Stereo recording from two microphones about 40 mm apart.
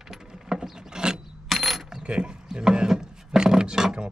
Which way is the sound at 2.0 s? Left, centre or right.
Right.